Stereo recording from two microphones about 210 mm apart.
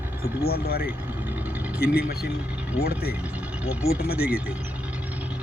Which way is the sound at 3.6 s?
5° right (ahead or behind).